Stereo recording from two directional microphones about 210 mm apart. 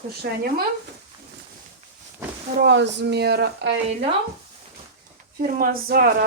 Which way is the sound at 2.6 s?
55° right (ahead or behind).